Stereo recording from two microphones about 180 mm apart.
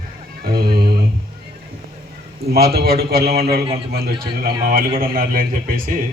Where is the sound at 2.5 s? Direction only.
60° right (ahead or behind).